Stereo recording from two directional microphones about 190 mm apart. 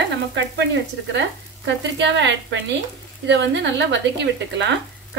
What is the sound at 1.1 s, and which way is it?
Speech, 65° right (ahead or behind).